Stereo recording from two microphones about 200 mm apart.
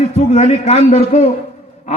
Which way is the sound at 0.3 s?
35° left (ahead or behind).